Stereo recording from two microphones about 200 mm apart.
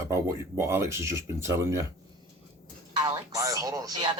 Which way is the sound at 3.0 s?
15° right (ahead or behind).